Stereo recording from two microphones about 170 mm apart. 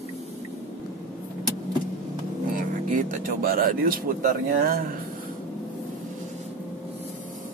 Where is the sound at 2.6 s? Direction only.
50° right (ahead or behind).